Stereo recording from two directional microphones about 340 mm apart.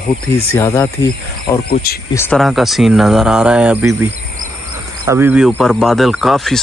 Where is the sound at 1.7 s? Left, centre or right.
Left.